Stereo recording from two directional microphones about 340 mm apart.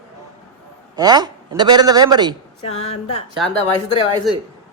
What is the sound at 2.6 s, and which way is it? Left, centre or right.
Speech, centre.